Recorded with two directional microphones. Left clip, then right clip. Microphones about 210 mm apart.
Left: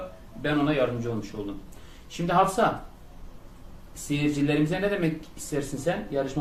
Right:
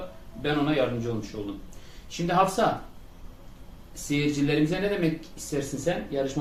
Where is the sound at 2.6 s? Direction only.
15° left (ahead or behind).